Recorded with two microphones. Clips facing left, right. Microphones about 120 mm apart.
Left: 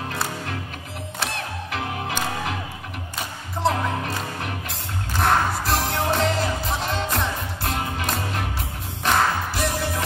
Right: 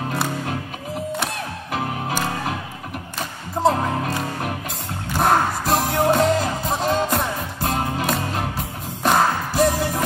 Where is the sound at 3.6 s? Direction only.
40° right (ahead or behind).